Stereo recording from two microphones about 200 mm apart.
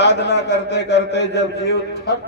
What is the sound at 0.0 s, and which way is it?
A man's voice, 60° left (ahead or behind).